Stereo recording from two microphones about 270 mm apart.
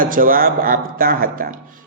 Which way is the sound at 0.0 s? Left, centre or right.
Right.